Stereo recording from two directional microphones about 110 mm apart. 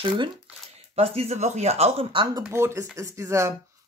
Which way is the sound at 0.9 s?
65° right (ahead or behind).